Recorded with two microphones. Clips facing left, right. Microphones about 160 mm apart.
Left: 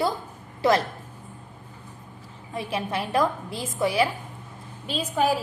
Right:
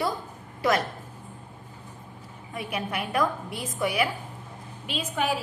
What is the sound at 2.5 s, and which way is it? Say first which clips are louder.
A woman's voice: left 3 dB; 30° left (ahead or behind).